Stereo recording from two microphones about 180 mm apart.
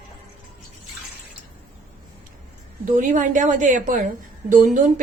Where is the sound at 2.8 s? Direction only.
45° right (ahead or behind).